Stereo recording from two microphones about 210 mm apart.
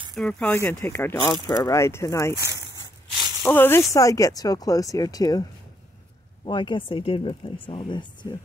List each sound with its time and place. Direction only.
0.1 s speech: 5° left (ahead or behind)
2.3 s speech: 15° right (ahead or behind)
3.4 s speech: 10° left (ahead or behind)
6.4 s speech: 20° left (ahead or behind)